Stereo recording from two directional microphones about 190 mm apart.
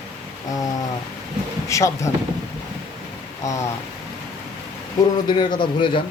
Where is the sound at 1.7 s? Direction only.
15° left (ahead or behind).